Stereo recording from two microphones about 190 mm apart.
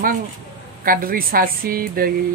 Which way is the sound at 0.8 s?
50° right (ahead or behind).